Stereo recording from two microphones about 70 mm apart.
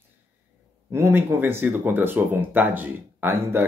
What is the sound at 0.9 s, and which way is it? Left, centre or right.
Speech, right.